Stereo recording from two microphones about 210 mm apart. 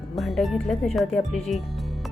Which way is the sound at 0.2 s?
Centre (ahead or behind).